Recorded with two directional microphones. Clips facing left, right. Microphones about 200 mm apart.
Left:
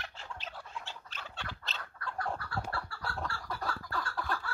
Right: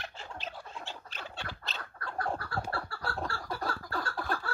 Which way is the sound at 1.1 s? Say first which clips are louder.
Right 3 dB; 10° right (ahead or behind).